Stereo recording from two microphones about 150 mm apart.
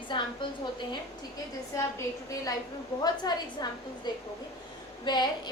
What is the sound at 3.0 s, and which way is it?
A woman's voice, 30° left (ahead or behind).